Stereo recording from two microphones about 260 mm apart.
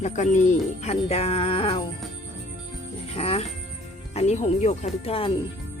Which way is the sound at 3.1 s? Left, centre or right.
Left.